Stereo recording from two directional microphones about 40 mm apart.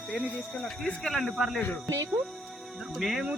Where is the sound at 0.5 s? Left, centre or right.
Centre.